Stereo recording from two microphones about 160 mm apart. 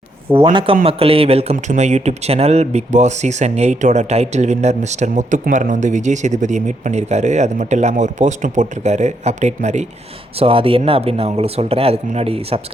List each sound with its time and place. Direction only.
0.3 s speech: 35° right (ahead or behind)
10.3 s speech: 35° right (ahead or behind)